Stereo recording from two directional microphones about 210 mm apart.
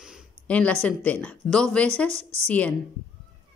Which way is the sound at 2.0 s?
30° right (ahead or behind).